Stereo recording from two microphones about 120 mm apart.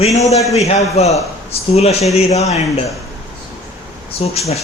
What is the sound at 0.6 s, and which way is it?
A man's voice, 65° left (ahead or behind).